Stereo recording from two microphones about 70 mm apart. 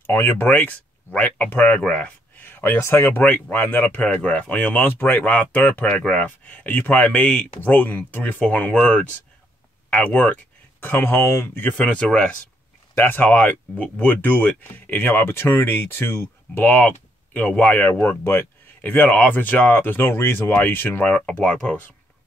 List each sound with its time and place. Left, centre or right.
0.0 s speech: left
3.1 s speech: left
9.8 s speech: left
11.7 s speech: centre
12.9 s speech: left
21.1 s speech: centre